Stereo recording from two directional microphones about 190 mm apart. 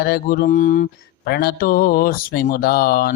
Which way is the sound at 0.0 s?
50° left (ahead or behind).